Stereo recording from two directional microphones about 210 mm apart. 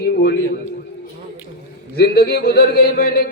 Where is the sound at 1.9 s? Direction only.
50° left (ahead or behind).